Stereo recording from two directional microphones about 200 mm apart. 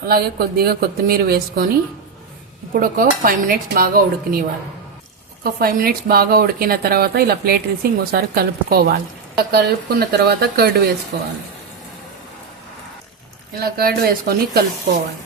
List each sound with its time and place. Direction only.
0.1 s speech: 50° right (ahead or behind)
13.6 s speech: 50° right (ahead or behind)